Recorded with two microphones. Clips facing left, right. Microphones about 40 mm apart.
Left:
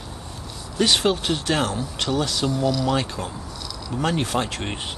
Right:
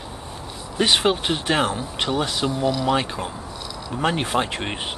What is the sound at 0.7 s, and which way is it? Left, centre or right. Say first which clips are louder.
Speech: right 1 dB; right.